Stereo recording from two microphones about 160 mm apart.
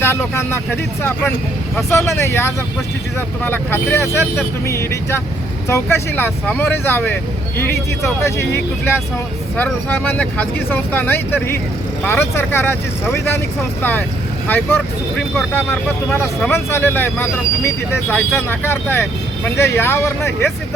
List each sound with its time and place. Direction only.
0.0 s speech: 15° left (ahead or behind)
1.9 s speech: 15° left (ahead or behind)
8.2 s speech: 15° left (ahead or behind)
14.4 s speech: 10° left (ahead or behind)